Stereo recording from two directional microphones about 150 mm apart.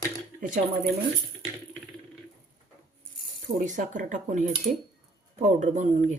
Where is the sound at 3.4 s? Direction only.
60° right (ahead or behind).